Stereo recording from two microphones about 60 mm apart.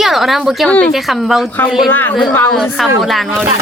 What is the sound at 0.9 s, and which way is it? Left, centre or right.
Speech, centre.